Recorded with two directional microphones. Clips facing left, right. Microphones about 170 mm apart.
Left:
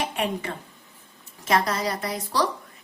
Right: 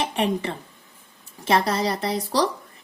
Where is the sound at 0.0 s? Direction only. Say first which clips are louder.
Right 4 dB; 30° right (ahead or behind).